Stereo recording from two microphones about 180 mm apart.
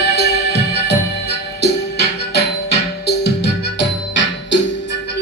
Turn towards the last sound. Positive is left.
turn(degrees=85)